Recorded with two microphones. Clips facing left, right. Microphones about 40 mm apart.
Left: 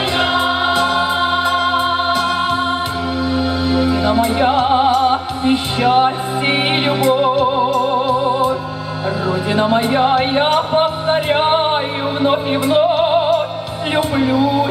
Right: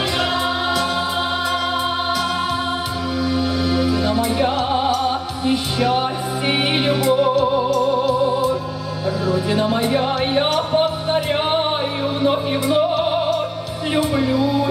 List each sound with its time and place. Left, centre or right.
0.2 s music: left
13.9 s speech: left